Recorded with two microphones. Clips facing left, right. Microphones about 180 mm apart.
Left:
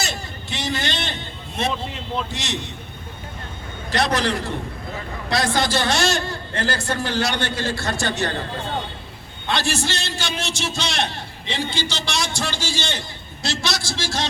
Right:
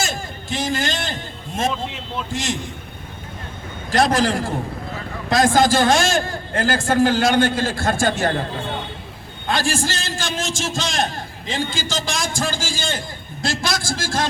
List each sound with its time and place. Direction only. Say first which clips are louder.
0.0 s a sound: right 3 dB; 45° right (ahead or behind)
2.3 s a man's voice: right 4 dB; 45° right (ahead or behind)
3.9 s a man's voice: right 4 dB; 45° right (ahead or behind)
9.7 s a man's voice: right 2 dB; 45° right (ahead or behind)